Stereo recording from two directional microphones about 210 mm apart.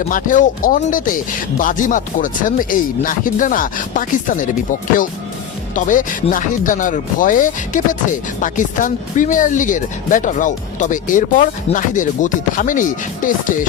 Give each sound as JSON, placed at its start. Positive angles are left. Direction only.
{"t": 0.1, "sound": "speech", "side_deg": 40}